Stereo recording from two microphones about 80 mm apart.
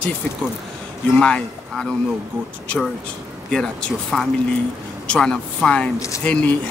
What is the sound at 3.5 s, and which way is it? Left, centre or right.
Speech, centre.